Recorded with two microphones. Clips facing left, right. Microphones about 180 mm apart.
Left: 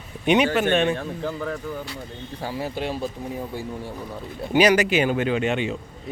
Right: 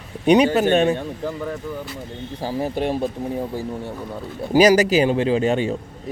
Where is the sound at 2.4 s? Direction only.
45° right (ahead or behind).